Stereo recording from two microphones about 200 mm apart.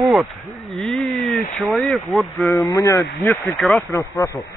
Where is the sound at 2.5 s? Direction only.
15° left (ahead or behind).